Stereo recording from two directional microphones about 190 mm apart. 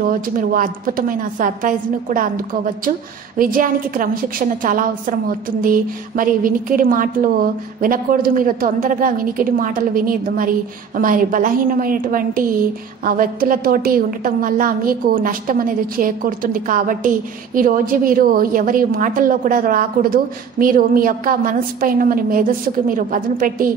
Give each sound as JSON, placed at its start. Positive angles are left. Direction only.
{"t": 0.1, "sound": "a woman's voice", "side_deg": -45}